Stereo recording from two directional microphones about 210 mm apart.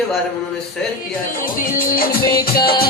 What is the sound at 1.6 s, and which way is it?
Music, 45° left (ahead or behind).